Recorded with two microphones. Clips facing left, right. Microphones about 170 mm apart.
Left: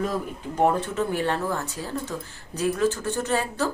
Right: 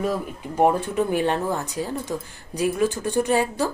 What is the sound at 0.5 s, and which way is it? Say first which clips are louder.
A woman's voice: right 3 dB; 15° right (ahead or behind).